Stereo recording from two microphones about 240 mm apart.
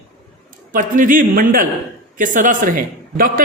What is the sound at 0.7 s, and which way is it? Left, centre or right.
A man's voice, right.